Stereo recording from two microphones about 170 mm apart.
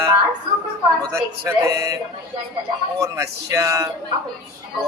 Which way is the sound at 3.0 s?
20° right (ahead or behind).